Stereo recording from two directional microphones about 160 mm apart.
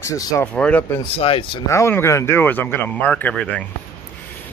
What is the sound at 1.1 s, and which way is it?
Speech, 35° left (ahead or behind).